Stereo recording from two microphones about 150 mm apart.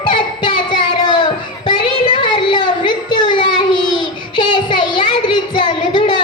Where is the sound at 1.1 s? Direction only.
30° left (ahead or behind).